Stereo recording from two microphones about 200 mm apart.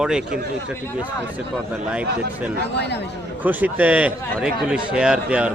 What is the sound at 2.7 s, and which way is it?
Speech, 55° left (ahead or behind).